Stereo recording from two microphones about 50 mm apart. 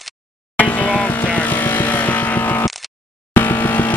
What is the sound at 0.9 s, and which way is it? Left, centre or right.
Vehicle, left.